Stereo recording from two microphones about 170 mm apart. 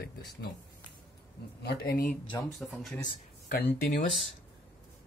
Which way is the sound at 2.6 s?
Centre (ahead or behind).